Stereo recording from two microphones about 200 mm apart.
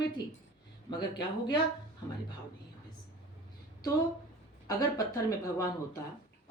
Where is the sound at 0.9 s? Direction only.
20° left (ahead or behind).